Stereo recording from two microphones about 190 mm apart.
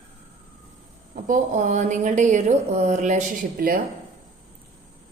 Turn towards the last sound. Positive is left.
turn(degrees=-45)  # may be behind; listen again after turning